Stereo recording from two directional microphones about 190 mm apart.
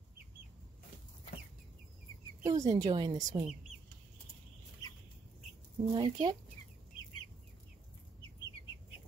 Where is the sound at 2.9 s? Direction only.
25° right (ahead or behind).